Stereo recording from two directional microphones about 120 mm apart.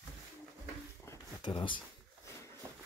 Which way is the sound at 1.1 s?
20° left (ahead or behind).